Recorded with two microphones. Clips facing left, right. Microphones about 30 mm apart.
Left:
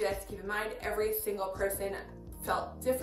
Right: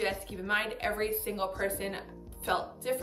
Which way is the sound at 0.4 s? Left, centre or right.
Right.